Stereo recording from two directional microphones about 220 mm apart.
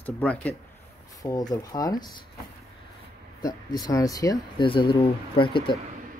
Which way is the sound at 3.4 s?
15° left (ahead or behind).